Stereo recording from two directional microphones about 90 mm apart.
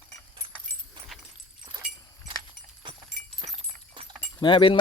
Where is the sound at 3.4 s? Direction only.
75° right (ahead or behind).